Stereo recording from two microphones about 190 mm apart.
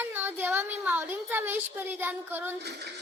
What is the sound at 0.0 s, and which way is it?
Speech, 10° right (ahead or behind).